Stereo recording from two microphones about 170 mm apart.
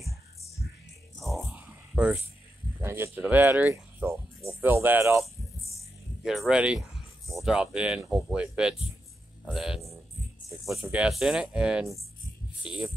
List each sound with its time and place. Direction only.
1.2 s a sound: 5° right (ahead or behind)
2.8 s speech: 15° right (ahead or behind)
6.2 s speech: centre (ahead or behind)